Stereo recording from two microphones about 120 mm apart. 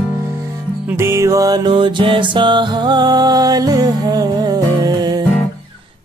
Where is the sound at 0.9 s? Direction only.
25° right (ahead or behind).